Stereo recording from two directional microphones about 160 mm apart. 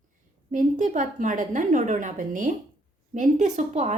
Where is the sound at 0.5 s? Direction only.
50° right (ahead or behind).